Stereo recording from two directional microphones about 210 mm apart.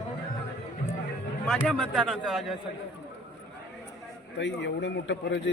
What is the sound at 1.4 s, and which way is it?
A man's voice, centre (ahead or behind).